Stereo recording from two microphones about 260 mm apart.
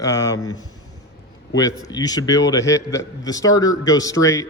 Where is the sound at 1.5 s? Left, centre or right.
Centre.